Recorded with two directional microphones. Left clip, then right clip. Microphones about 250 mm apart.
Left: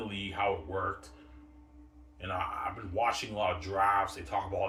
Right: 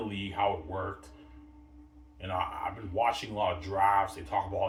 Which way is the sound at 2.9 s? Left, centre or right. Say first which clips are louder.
Right 2 dB; centre.